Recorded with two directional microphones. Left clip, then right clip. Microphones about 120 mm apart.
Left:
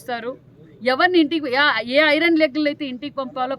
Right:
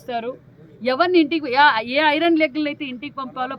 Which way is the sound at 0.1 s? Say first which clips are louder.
Right 1 dB; 30° left (ahead or behind).